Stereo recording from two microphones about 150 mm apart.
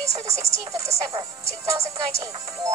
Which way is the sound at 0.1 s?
20° right (ahead or behind).